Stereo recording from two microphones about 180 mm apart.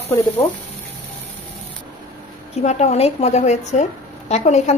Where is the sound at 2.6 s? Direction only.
40° left (ahead or behind).